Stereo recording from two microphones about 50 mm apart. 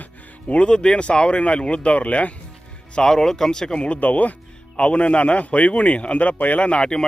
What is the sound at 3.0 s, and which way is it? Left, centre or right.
Speech, centre.